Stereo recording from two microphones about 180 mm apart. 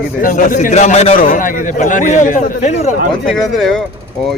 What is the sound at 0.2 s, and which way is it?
A man's voice, 50° left (ahead or behind).